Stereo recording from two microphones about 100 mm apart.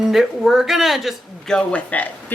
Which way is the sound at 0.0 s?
Centre (ahead or behind).